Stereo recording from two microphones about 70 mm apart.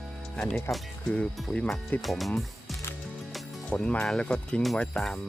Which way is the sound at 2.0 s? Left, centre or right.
Centre.